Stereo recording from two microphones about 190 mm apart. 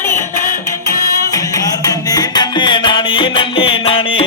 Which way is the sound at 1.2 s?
20° left (ahead or behind).